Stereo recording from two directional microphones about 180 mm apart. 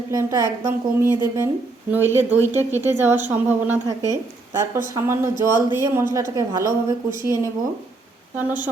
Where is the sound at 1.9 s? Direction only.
10° right (ahead or behind).